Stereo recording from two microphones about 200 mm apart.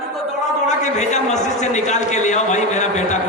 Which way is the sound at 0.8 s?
35° left (ahead or behind).